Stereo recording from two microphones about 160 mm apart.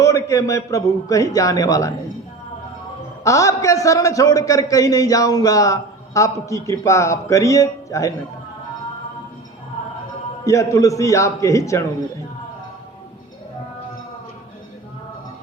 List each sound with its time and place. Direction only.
0.0 s a man's voice: 20° left (ahead or behind)
3.2 s a man's voice: 20° left (ahead or behind)
10.4 s a man's voice: 20° left (ahead or behind)